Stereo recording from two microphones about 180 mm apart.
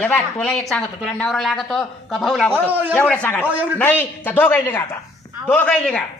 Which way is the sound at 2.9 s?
10° left (ahead or behind).